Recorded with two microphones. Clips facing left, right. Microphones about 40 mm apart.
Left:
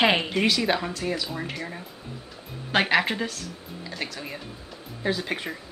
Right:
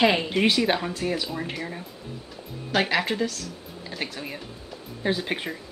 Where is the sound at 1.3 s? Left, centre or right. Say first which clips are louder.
Right 1 dB; centre.